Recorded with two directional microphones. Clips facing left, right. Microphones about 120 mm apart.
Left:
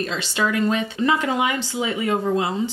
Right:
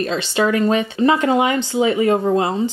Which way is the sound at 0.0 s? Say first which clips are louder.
Right 5 dB; 35° right (ahead or behind).